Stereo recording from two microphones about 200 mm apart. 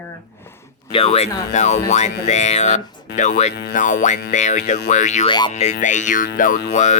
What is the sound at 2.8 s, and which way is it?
Speech, 20° left (ahead or behind).